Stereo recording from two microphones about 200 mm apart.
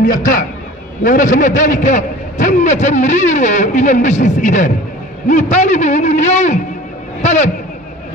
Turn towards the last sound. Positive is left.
turn(degrees=35)  # may be behind; listen again after turning